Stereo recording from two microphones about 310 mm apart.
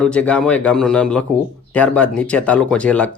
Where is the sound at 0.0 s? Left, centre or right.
Centre.